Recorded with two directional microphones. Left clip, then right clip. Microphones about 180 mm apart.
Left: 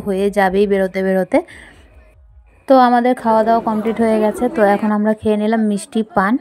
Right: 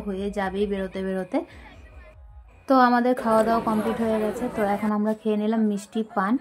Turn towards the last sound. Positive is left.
turn(degrees=35)  # may be behind; listen again after turning